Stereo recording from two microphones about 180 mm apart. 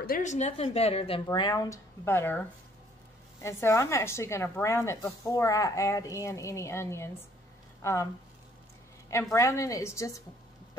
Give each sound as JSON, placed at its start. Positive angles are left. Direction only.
{"t": 0.0, "sound": "a woman's voice", "side_deg": 50}
{"t": 3.4, "sound": "a woman's voice", "side_deg": 15}
{"t": 9.3, "sound": "a woman's voice", "side_deg": 15}